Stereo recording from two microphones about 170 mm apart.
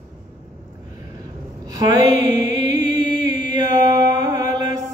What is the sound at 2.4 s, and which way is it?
Mantra, 25° right (ahead or behind).